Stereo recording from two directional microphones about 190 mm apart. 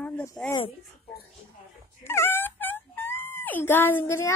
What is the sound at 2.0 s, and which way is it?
Speech, 10° left (ahead or behind).